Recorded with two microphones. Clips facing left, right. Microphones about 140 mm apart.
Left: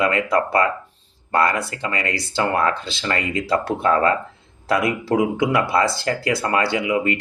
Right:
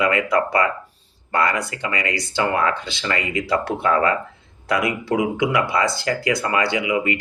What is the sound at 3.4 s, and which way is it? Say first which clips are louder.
Speech: left 2 dB; 25° left (ahead or behind).